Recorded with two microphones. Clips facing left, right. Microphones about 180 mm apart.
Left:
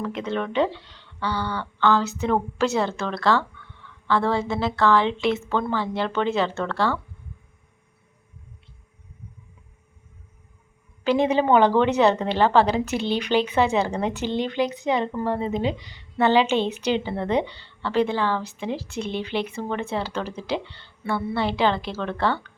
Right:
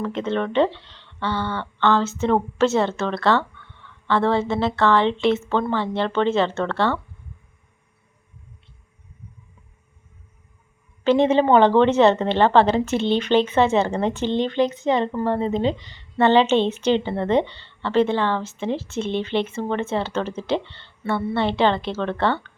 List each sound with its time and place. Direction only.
0.0 s a woman's voice: centre (ahead or behind)
1.3 s a sound: 20° right (ahead or behind)
1.8 s a woman's voice: centre (ahead or behind)
11.1 s a woman's voice: centre (ahead or behind)